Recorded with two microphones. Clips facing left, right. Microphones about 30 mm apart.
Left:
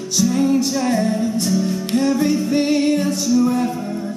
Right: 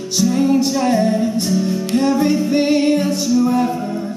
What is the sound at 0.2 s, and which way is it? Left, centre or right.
Music, centre.